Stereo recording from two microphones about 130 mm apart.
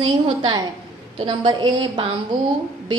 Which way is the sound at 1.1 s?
40° right (ahead or behind).